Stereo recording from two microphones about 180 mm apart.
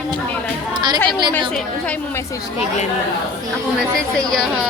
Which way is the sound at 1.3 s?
5° left (ahead or behind).